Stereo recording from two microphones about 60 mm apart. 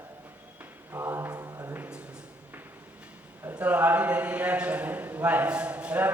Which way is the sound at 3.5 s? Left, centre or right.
Right.